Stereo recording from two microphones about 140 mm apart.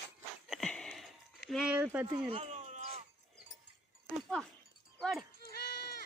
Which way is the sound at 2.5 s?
55° right (ahead or behind).